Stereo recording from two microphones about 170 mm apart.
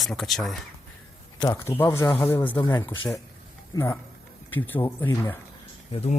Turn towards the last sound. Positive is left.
turn(degrees=35)  # may be behind; listen again after turning